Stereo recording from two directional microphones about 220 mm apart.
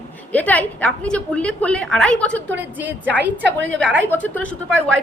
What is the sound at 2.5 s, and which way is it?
Speech, 10° right (ahead or behind).